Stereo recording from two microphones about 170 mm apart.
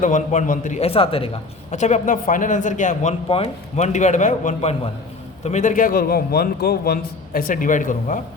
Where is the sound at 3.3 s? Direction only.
35° left (ahead or behind).